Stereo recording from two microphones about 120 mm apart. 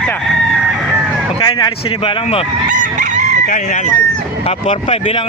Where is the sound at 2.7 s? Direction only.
90° right.